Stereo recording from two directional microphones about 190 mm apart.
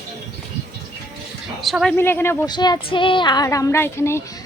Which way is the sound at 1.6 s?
Centre (ahead or behind).